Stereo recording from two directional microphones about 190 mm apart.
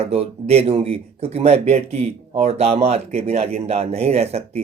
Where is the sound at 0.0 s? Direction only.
30° right (ahead or behind).